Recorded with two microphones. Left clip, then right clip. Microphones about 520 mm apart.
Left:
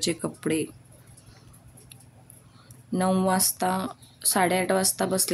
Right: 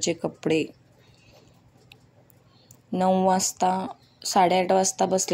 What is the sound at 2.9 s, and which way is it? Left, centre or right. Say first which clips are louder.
Speech: right 3 dB; left.